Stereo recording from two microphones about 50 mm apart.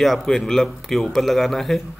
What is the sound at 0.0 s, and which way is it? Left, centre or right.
A man's voice, centre.